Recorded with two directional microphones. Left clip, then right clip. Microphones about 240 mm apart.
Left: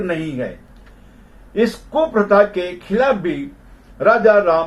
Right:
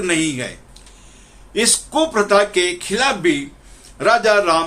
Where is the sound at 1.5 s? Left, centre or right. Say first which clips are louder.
Even; right.